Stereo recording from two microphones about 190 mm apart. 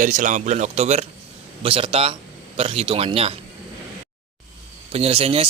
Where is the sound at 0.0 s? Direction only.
40° right (ahead or behind).